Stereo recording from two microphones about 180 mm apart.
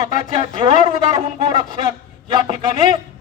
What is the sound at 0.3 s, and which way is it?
Speech, 25° right (ahead or behind).